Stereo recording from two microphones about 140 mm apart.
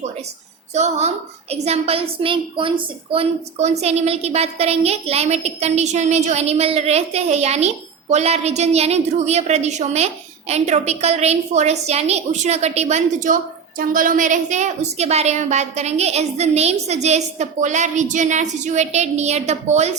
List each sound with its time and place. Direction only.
0.7 s a woman's voice: 55° right (ahead or behind)